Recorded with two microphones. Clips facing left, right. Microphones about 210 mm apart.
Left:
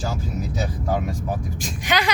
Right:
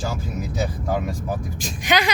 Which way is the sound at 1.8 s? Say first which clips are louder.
Right 2 dB; 15° right (ahead or behind).